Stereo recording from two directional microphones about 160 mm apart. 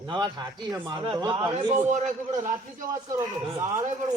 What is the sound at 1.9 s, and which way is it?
Speech, 50° right (ahead or behind).